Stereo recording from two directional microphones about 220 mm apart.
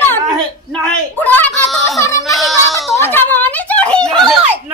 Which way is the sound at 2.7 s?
10° left (ahead or behind).